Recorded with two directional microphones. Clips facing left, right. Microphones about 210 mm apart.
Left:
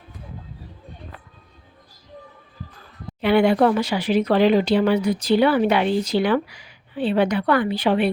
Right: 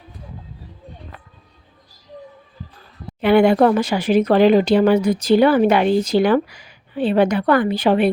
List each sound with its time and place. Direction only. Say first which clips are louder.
3.2 s speech: right 3 dB; 50° right (ahead or behind)